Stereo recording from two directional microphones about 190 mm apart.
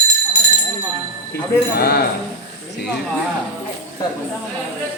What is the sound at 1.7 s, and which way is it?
Speech, 55° left (ahead or behind).